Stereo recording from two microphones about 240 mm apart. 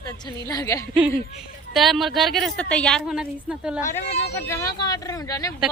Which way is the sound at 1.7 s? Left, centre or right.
Centre.